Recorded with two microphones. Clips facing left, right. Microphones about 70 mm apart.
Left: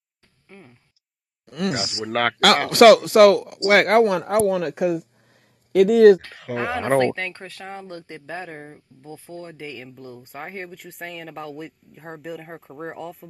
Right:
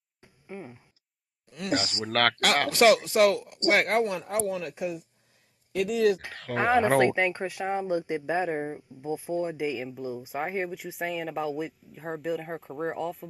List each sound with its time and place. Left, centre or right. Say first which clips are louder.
0.2 s a sound: right 6 dB; centre
1.4 s speech: left 11 dB; left
1.7 s speech: even; centre
2.7 s speech: left 10 dB; left
6.3 s speech: right 2 dB; centre
7.0 s speech: left 1 dB; centre